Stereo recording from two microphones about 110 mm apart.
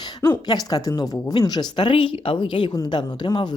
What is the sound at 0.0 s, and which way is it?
Speech, 35° left (ahead or behind).